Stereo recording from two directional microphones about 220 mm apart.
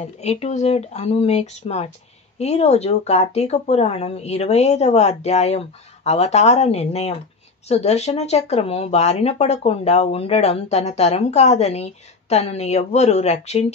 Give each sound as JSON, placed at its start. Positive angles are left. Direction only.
{"t": 0.0, "sound": "speech", "side_deg": 30}